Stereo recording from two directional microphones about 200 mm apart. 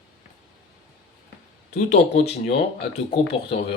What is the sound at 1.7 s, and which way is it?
Speech, 35° left (ahead or behind).